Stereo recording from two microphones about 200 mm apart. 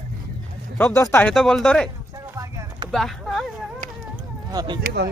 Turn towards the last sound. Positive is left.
turn(degrees=-55)  # may be behind; listen again after turning